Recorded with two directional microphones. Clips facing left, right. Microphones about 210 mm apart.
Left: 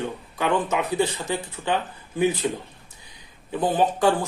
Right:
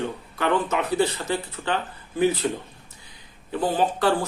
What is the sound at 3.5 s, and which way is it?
Speech, 15° left (ahead or behind).